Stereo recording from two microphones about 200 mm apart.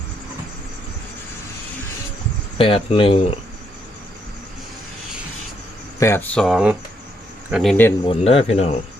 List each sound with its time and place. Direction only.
2.6 s speech: 30° left (ahead or behind)
6.0 s speech: 10° left (ahead or behind)
8.0 s speech: 30° left (ahead or behind)